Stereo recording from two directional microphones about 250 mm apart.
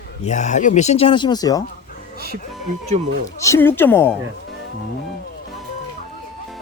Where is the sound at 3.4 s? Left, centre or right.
Centre.